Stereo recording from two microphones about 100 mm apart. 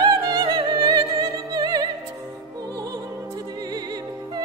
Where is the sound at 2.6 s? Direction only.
40° right (ahead or behind).